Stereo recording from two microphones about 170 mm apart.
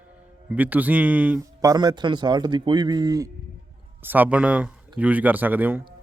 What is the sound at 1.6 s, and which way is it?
Speech, 25° right (ahead or behind).